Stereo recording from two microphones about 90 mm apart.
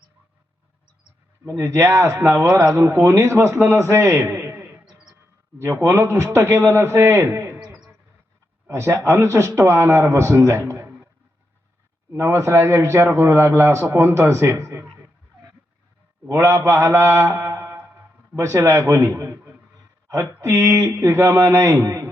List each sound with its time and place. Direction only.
1.5 s a man's voice: 30° right (ahead or behind)
8.6 s a man's voice: 30° right (ahead or behind)
12.1 s a man's voice: 30° right (ahead or behind)
16.3 s a man's voice: 30° right (ahead or behind)
20.4 s a man's voice: 30° right (ahead or behind)